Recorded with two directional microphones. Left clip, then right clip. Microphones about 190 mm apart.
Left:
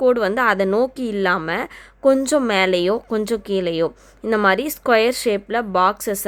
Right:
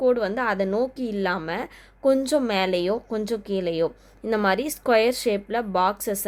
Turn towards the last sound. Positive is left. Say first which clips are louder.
# left 5 dB
turn(degrees=20)  # may be behind; listen again after turning